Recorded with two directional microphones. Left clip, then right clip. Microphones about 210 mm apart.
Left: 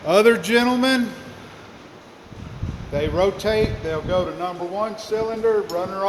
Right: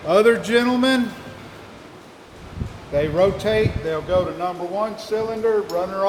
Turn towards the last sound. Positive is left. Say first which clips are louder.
# right 1 dB
turn(degrees=25)  # may be behind; listen again after turning